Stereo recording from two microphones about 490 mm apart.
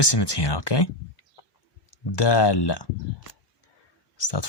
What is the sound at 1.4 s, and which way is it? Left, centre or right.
Chicken, left.